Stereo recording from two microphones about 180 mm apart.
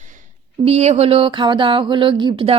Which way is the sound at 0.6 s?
35° right (ahead or behind).